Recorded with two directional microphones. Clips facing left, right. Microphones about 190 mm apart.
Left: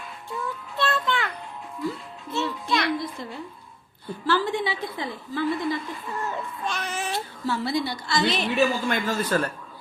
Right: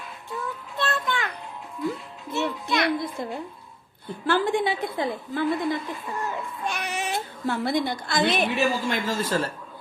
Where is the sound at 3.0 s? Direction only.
55° right (ahead or behind).